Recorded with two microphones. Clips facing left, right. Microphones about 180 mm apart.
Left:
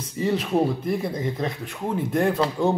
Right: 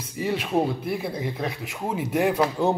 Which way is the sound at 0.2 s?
5° right (ahead or behind).